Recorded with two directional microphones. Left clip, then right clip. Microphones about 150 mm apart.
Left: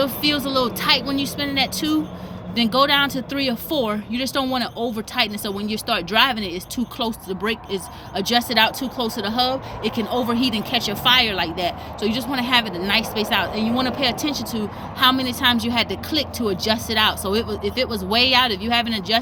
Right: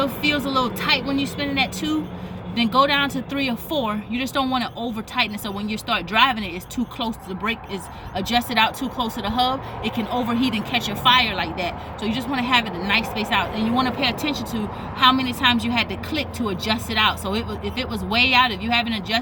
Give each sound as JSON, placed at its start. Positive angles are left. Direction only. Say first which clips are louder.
{"t": 0.0, "sound": "speech", "louder": "left 1 dB", "side_deg": -10}
{"t": 14.0, "sound": "speech", "louder": "left 1 dB", "side_deg": -5}